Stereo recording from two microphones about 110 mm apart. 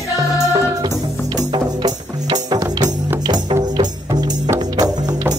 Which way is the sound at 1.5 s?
40° right (ahead or behind).